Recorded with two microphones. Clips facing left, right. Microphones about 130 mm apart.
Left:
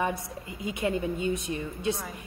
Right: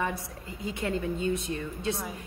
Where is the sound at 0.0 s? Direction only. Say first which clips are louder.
Left 2 dB; 20° left (ahead or behind).